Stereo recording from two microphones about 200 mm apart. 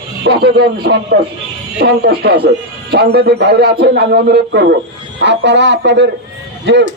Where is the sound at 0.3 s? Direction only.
55° right (ahead or behind).